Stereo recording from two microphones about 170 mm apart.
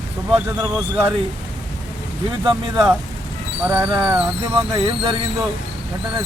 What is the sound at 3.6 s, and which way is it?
Speech, 15° right (ahead or behind).